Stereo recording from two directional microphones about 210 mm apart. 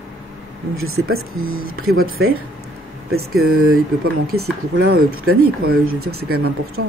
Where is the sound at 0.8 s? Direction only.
85° right.